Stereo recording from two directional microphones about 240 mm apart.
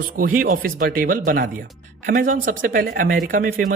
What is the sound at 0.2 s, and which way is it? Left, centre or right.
Speech, right.